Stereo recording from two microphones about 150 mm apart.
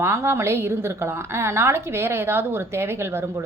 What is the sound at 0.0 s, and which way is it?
A woman's voice, 20° right (ahead or behind).